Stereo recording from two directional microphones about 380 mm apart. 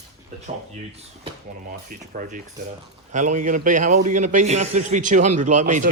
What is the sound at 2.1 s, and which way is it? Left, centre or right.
A man's voice, right.